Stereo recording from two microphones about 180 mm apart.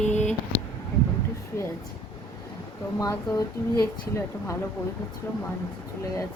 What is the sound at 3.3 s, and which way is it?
Speech, 15° left (ahead or behind).